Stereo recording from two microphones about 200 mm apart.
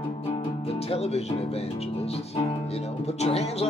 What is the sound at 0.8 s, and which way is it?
Speech, 30° left (ahead or behind).